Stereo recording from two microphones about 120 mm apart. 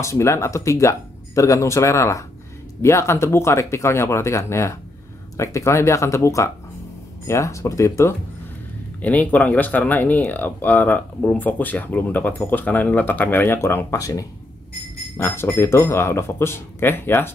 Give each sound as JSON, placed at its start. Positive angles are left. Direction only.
{"t": 0.0, "sound": "speech", "side_deg": 25}
{"t": 9.0, "sound": "speech", "side_deg": 15}
{"t": 15.1, "sound": "speech", "side_deg": 15}